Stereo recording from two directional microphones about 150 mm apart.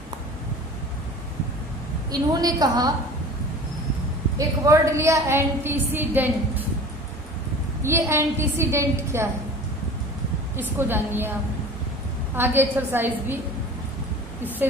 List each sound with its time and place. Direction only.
2.0 s a woman's voice: 25° right (ahead or behind)
4.4 s a woman's voice: 20° right (ahead or behind)
7.8 s a woman's voice: 15° right (ahead or behind)
10.6 s a woman's voice: 15° right (ahead or behind)
12.4 s a woman's voice: 15° right (ahead or behind)